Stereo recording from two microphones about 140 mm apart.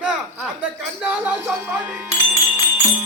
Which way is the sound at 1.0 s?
15° right (ahead or behind).